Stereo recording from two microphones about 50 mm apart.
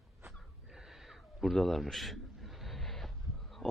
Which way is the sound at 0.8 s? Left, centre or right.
Centre.